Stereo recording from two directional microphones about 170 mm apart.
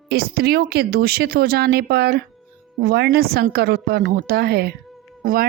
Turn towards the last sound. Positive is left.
turn(degrees=-55)  # may be behind; listen again after turning